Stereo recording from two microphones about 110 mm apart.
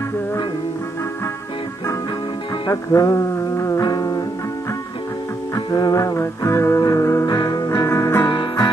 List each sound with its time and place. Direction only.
2.7 s music: 30° left (ahead or behind)
5.5 s music: 35° left (ahead or behind)
7.3 s music: 40° left (ahead or behind)
8.3 s music: 40° left (ahead or behind)